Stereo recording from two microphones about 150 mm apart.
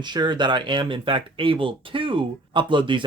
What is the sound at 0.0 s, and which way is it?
Speech, 30° right (ahead or behind).